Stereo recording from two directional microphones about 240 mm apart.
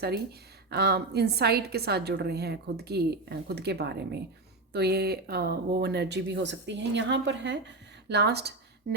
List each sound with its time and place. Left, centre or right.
0.7 s a woman's voice: right